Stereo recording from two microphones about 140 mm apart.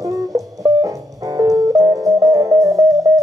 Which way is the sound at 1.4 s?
25° right (ahead or behind).